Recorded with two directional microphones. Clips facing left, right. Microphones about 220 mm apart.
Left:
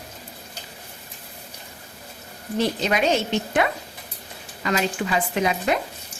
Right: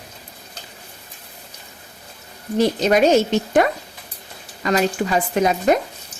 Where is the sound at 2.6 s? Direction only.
40° right (ahead or behind).